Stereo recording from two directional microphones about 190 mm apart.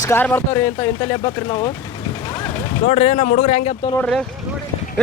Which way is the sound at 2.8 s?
35° left (ahead or behind).